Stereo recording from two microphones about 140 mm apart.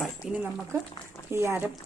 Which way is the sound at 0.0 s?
15° right (ahead or behind).